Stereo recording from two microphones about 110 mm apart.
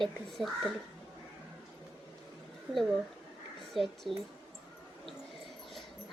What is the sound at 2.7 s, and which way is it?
A child's voice, 10° left (ahead or behind).